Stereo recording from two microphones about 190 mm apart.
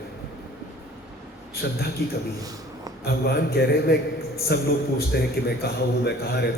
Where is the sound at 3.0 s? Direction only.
55° left (ahead or behind).